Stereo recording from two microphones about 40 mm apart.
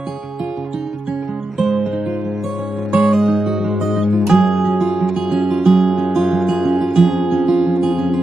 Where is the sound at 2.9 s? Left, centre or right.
Centre.